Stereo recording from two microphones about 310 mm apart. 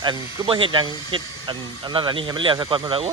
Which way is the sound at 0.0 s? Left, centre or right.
Centre.